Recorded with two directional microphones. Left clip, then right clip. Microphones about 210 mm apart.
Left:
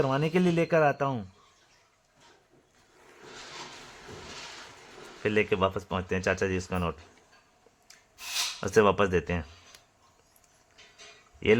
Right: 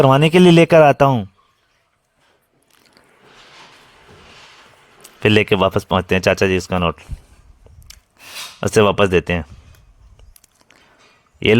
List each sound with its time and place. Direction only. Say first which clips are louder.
0.0 s speech: right 15 dB; 50° right (ahead or behind)
5.2 s speech: right 12 dB; 50° right (ahead or behind)
8.6 s speech: right 10 dB; 35° right (ahead or behind)
11.4 s speech: right 9 dB; 40° right (ahead or behind)